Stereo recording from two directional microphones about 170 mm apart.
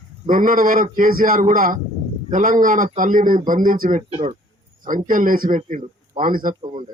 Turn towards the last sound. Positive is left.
turn(degrees=-55)  # may be behind; listen again after turning